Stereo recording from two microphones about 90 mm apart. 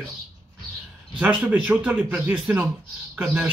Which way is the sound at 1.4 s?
20° right (ahead or behind).